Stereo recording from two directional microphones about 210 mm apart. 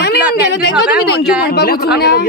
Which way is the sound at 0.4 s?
55° left (ahead or behind).